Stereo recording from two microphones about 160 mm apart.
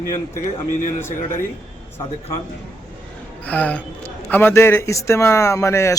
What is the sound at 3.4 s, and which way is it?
Speech, 10° left (ahead or behind).